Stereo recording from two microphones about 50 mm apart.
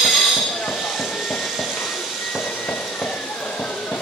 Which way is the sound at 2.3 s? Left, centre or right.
Centre.